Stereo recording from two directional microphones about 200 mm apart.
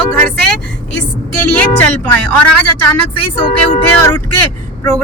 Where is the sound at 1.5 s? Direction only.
10° left (ahead or behind).